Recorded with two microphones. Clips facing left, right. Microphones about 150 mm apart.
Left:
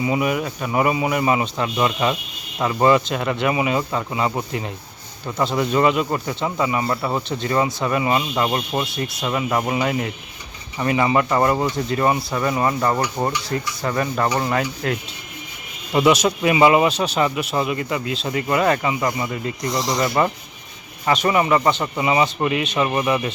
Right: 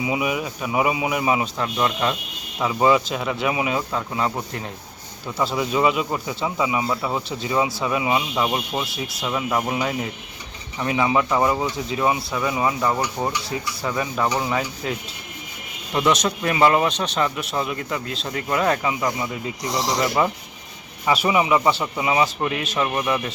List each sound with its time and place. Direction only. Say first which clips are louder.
0.0 s speech: left 3 dB; 5° right (ahead or behind)
19.6 s speech: left 1 dB; 75° right (ahead or behind)
19.9 s speech: left 1 dB; centre (ahead or behind)